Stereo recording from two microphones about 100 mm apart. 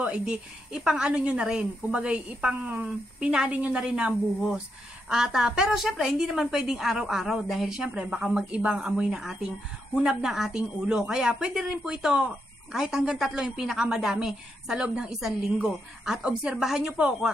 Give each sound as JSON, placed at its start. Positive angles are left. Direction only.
{"t": 0.0, "sound": "a woman's voice", "side_deg": -10}
{"t": 5.1, "sound": "a woman's voice", "side_deg": -5}